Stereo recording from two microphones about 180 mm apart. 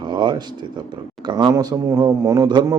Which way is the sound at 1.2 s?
25° right (ahead or behind).